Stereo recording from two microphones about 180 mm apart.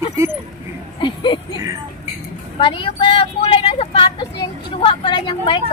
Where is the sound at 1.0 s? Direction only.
25° left (ahead or behind).